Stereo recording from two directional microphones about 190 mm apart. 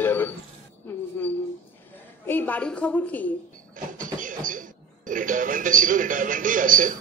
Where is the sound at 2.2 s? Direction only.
10° left (ahead or behind).